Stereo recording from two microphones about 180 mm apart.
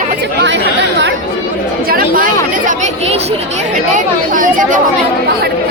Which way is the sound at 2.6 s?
40° right (ahead or behind).